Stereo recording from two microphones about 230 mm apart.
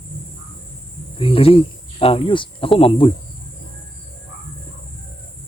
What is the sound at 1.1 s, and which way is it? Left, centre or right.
Speech, left.